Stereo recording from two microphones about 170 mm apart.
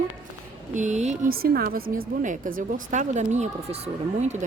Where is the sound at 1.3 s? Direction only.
60° right (ahead or behind).